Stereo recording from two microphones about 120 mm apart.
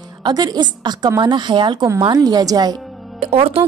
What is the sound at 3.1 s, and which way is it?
Speech, 55° right (ahead or behind).